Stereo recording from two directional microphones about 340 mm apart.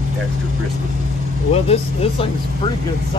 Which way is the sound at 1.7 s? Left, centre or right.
Centre.